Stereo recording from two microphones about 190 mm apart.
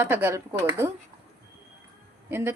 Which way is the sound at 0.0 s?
15° right (ahead or behind).